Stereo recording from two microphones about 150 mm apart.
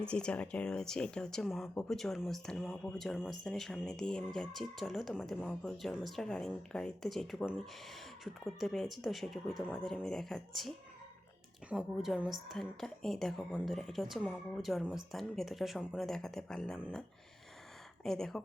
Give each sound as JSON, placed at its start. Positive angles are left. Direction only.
{"t": 0.0, "sound": "speech", "side_deg": 5}
{"t": 18.0, "sound": "speech", "side_deg": 5}